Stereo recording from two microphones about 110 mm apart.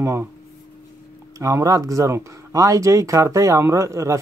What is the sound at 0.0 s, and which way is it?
Speech, 25° right (ahead or behind).